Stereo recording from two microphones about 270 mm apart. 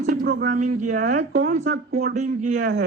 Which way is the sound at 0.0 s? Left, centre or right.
Right.